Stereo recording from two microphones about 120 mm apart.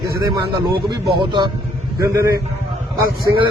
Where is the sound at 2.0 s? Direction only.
25° right (ahead or behind).